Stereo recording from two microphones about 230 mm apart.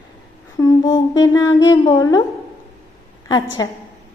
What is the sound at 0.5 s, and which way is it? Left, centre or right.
Speech, centre.